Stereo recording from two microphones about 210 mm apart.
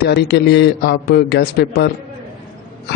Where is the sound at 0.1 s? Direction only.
55° left (ahead or behind).